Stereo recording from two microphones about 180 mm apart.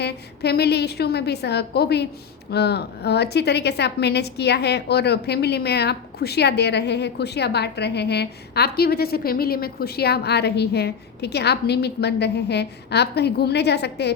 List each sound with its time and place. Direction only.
0.0 s a woman's voice: 65° left (ahead or behind)